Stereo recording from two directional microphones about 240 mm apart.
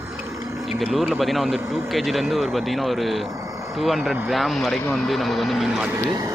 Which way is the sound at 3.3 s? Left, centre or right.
Centre.